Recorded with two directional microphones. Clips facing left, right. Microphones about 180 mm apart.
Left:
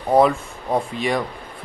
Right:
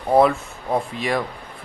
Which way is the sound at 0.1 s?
Centre (ahead or behind).